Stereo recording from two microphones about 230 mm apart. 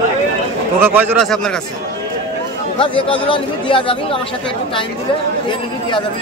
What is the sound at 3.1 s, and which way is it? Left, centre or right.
Speech, left.